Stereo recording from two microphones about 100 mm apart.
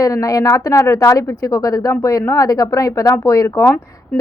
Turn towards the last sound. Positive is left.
turn(degrees=30)  # may be behind; listen again after turning